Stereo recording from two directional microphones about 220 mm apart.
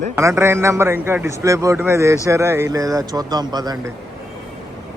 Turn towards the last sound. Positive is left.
turn(degrees=-20)  # may be behind; listen again after turning